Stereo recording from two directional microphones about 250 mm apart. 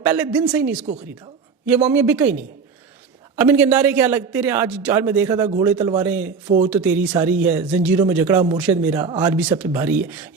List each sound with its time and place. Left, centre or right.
0.0 s a man's voice: centre
1.6 s a man's voice: centre